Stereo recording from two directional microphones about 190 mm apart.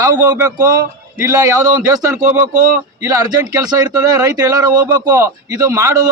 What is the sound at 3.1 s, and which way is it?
Speech, 20° right (ahead or behind).